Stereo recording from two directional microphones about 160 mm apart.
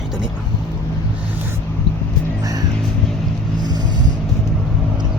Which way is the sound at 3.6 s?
25° right (ahead or behind).